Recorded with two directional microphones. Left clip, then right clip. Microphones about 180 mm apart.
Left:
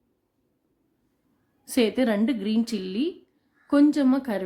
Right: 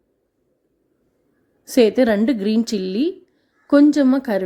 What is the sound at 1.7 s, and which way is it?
A woman's voice, 25° right (ahead or behind).